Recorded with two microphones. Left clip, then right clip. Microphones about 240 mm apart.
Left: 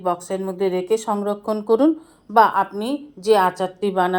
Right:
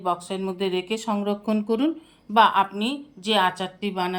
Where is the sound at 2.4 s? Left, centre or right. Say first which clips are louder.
Left 2 dB; left.